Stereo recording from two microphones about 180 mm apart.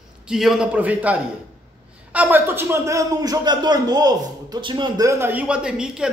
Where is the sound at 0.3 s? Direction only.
Centre (ahead or behind).